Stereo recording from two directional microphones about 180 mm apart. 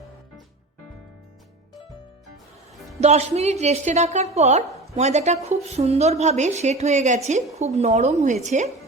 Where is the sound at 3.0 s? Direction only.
35° right (ahead or behind).